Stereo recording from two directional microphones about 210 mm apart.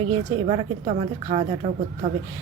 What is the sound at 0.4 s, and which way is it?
A woman's voice, 30° right (ahead or behind).